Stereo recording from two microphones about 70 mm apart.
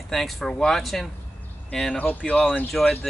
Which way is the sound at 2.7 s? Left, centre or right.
Centre.